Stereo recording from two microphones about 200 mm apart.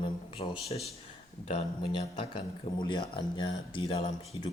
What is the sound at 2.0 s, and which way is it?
Speech, 25° left (ahead or behind).